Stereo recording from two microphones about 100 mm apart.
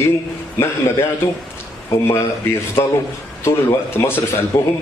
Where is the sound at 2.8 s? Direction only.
25° left (ahead or behind).